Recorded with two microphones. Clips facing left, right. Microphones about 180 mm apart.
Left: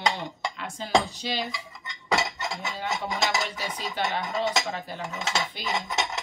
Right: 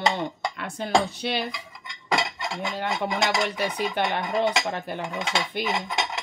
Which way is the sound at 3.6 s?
60° right (ahead or behind).